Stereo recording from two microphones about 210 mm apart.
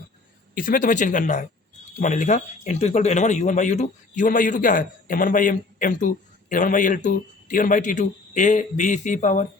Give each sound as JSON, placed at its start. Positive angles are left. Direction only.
{"t": 0.5, "sound": "speech", "side_deg": 40}